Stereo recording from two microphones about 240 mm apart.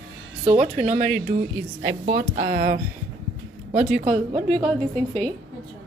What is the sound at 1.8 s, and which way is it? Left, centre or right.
Speech, right.